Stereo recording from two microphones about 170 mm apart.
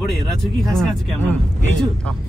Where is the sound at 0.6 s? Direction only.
Centre (ahead or behind).